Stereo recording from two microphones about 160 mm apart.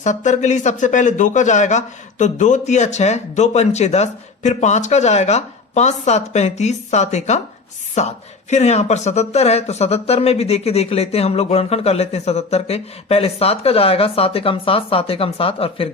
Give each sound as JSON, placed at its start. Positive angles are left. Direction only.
{"t": 0.0, "sound": "speech", "side_deg": 50}